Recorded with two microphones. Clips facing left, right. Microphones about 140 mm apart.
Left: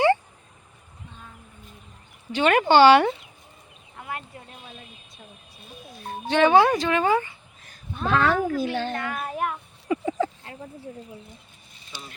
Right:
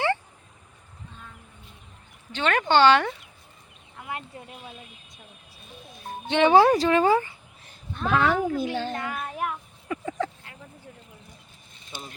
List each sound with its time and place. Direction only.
2.3 s speech: 10° left (ahead or behind)
4.1 s speech: 20° right (ahead or behind)
6.2 s speech: 20° right (ahead or behind)
6.5 s a woman's voice: 35° right (ahead or behind)
8.1 s speech: 15° right (ahead or behind)
9.1 s a child's voice: centre (ahead or behind)
9.9 s a sound: 10° left (ahead or behind)
10.4 s a sound: 30° left (ahead or behind)
11.9 s speech: 50° right (ahead or behind)